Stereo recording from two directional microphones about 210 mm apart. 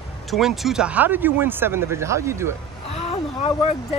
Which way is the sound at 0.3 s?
Centre (ahead or behind).